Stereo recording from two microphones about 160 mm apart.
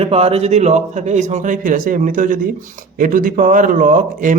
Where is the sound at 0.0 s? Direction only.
40° right (ahead or behind).